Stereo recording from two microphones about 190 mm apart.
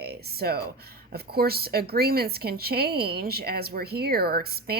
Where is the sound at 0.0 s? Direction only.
55° right (ahead or behind).